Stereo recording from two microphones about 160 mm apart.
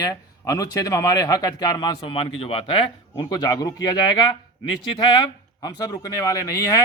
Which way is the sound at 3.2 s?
20° left (ahead or behind).